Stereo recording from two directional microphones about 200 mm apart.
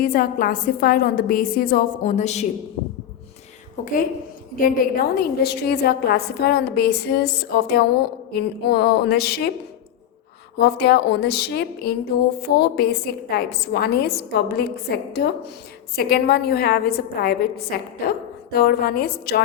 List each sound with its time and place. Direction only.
0.0 s a woman's voice: 45° left (ahead or behind)
3.8 s a woman's voice: 40° left (ahead or behind)
10.6 s a woman's voice: 55° left (ahead or behind)